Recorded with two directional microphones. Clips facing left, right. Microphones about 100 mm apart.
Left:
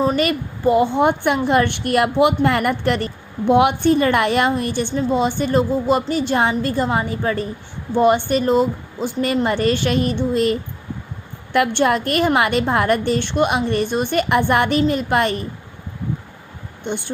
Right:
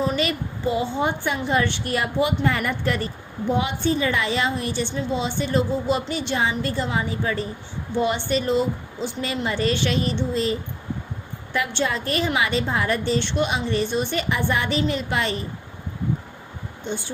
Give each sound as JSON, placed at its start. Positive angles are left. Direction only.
{"t": 0.0, "sound": "a woman's voice", "side_deg": 45}
{"t": 16.8, "sound": "speech", "side_deg": 60}